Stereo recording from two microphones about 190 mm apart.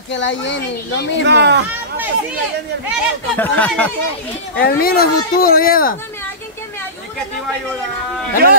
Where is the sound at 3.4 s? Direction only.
10° left (ahead or behind).